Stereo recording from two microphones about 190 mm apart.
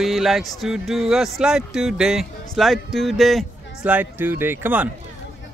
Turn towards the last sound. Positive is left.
turn(degrees=-10)  # may be behind; listen again after turning